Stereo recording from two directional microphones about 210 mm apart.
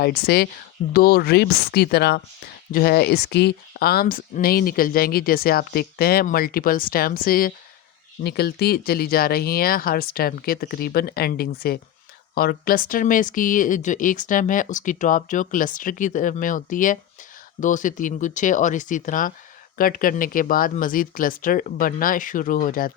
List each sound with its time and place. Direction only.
0.0 s speech: 50° left (ahead or behind)